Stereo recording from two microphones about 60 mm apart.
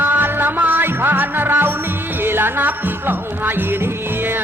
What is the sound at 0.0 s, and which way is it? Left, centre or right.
Music, right.